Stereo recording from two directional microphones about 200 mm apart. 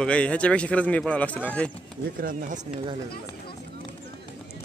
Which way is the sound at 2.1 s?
40° right (ahead or behind).